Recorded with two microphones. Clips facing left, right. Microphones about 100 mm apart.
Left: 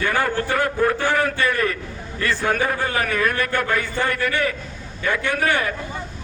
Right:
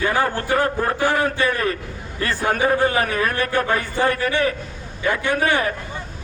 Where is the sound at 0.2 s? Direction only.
40° right (ahead or behind).